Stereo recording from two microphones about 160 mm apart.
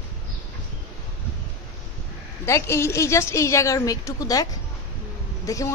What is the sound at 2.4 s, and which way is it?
A woman's voice, 15° left (ahead or behind).